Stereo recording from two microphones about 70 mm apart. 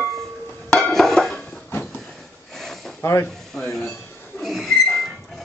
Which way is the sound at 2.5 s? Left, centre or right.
Centre.